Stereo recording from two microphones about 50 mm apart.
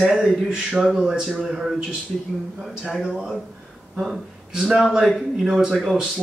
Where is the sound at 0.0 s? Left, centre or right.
Centre.